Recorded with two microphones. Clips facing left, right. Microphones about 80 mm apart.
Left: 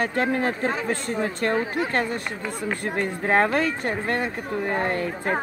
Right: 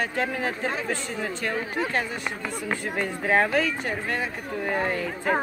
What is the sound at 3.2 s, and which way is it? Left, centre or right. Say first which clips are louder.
Speech: left 1 dB; left.